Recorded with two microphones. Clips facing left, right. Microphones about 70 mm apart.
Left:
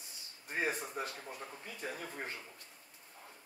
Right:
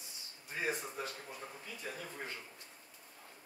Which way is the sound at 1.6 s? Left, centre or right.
Left.